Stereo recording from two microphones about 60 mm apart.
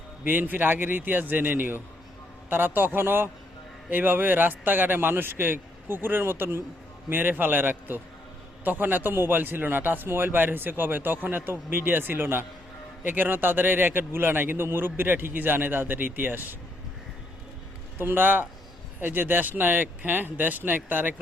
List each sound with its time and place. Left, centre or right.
0.3 s a man's voice: right
17.9 s a man's voice: right